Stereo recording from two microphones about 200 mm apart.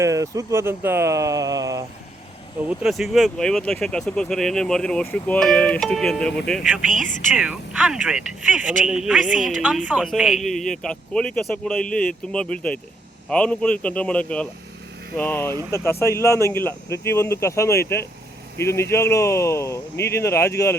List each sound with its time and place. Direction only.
0.0 s speech: 15° right (ahead or behind)
2.6 s speech: centre (ahead or behind)